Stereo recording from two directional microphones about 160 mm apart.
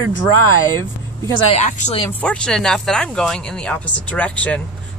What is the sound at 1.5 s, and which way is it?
Speech, 45° left (ahead or behind).